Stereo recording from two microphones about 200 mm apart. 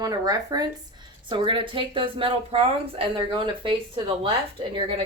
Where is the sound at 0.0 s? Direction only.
20° right (ahead or behind).